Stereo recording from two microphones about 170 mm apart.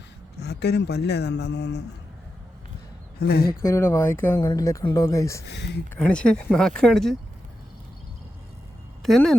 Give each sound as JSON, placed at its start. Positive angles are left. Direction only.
{"t": 0.3, "sound": "speech", "side_deg": 75}
{"t": 3.2, "sound": "speech", "side_deg": 65}
{"t": 3.6, "sound": "speech", "side_deg": 15}
{"t": 5.5, "sound": "speech", "side_deg": 80}
{"t": 5.9, "sound": "speech", "side_deg": 10}
{"t": 9.0, "sound": "speech", "side_deg": 0}